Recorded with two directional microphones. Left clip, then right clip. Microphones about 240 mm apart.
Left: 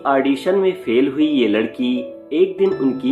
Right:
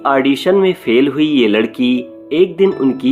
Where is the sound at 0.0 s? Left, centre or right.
Right.